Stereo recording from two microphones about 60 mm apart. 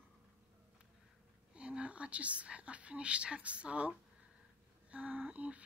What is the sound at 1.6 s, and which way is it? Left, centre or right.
Speech, centre.